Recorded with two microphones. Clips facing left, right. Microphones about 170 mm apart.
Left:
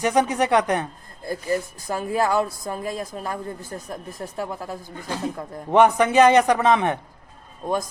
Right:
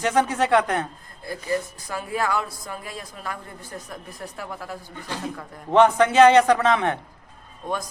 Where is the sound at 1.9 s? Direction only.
35° left (ahead or behind).